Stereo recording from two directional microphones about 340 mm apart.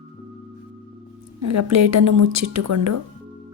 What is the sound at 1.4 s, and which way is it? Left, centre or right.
A woman's voice, right.